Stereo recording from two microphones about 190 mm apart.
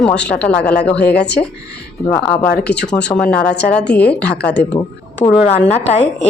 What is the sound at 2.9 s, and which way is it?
Speech, 5° left (ahead or behind).